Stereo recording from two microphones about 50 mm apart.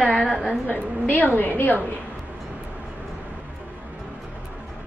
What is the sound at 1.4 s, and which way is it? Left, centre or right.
Speech, left.